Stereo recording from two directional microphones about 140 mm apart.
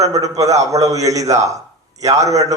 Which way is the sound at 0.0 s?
25° right (ahead or behind).